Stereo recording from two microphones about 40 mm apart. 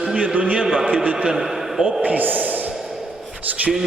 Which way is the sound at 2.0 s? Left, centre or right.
Right.